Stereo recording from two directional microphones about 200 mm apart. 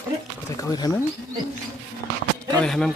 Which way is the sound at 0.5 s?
15° left (ahead or behind).